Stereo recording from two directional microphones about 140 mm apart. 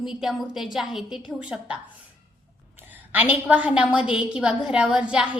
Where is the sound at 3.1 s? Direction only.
10° right (ahead or behind).